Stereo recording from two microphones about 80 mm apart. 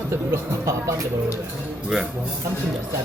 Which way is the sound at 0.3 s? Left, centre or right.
Right.